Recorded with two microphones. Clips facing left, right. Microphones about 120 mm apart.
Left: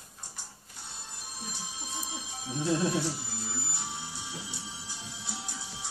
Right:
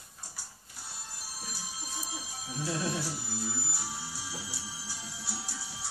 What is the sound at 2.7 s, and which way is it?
Speech, 25° left (ahead or behind).